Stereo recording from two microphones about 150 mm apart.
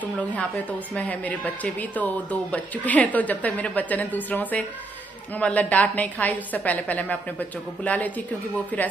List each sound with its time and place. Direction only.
0.0 s speech: 10° left (ahead or behind)